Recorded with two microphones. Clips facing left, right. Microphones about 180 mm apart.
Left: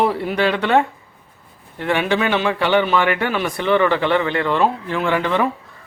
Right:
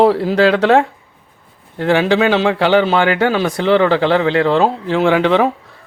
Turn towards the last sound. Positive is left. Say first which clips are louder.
# right 6 dB
turn(degrees=-90)